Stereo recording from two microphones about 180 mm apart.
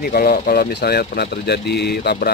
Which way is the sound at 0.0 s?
55° left (ahead or behind).